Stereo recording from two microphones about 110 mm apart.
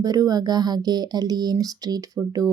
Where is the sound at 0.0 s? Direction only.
35° right (ahead or behind).